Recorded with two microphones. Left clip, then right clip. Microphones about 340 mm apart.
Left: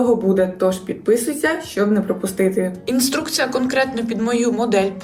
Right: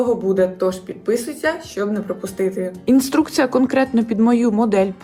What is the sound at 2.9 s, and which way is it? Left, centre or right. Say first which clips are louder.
A woman's voice: right 3 dB; centre.